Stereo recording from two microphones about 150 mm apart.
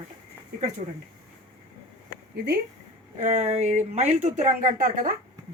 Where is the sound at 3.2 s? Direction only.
50° right (ahead or behind).